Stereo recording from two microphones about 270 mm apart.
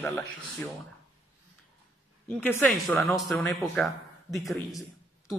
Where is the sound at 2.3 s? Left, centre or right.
Centre.